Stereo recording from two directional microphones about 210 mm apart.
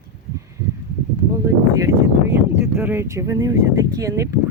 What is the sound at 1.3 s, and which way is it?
Speech, 15° right (ahead or behind).